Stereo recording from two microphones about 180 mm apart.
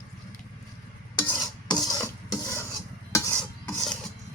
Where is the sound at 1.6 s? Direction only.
25° left (ahead or behind).